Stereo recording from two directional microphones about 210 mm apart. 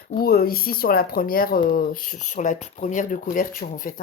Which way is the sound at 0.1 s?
45° left (ahead or behind).